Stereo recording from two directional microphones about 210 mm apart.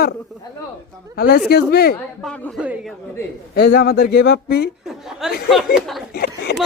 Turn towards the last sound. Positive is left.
turn(degrees=50)  # may be behind; listen again after turning